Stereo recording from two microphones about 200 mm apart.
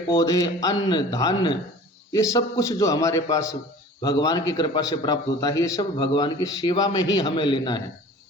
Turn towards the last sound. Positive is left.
turn(degrees=25)  # may be behind; listen again after turning